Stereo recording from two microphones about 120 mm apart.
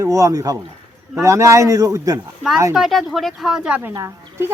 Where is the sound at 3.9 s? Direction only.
20° right (ahead or behind).